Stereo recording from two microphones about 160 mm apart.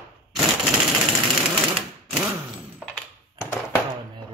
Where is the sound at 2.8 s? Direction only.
10° left (ahead or behind).